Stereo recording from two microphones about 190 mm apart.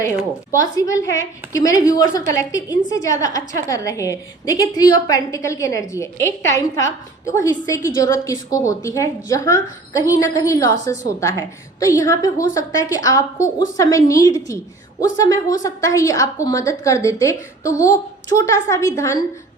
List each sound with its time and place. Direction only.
0.5 s a woman's voice: 20° left (ahead or behind)